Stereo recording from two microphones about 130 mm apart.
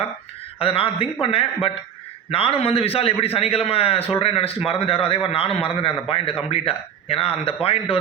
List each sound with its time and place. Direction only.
0.6 s a man's voice: 45° left (ahead or behind)